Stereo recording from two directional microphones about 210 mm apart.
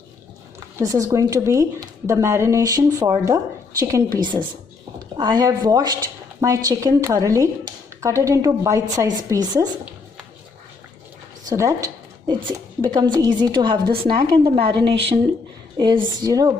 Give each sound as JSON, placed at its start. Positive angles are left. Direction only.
{"t": 0.8, "sound": "a woman's voice", "side_deg": -15}
{"t": 11.4, "sound": "a woman's voice", "side_deg": -15}